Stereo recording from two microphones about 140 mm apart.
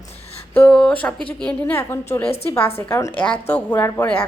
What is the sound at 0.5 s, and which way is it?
Speech, 10° left (ahead or behind).